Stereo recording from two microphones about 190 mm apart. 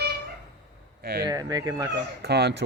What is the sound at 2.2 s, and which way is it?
Speech, 60° right (ahead or behind).